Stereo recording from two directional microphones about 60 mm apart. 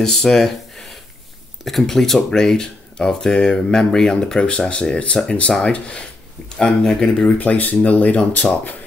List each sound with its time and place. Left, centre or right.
0.0 s speech: centre
7.2 s speech: left